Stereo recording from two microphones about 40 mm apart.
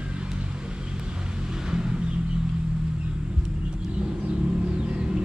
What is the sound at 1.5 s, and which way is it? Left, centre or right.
Vehicle, centre.